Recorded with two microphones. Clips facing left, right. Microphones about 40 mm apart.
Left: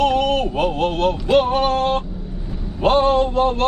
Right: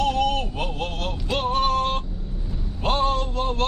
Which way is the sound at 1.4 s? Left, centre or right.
Left.